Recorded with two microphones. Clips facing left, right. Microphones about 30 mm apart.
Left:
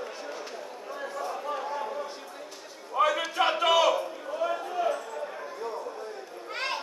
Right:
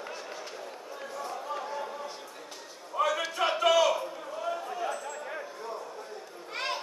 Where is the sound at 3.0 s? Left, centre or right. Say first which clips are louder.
Left 3 dB; left.